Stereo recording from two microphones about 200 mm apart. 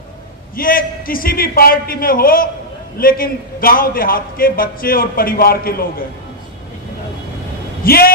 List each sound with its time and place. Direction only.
0.6 s a man's voice: 45° left (ahead or behind)
7.8 s a man's voice: 50° left (ahead or behind)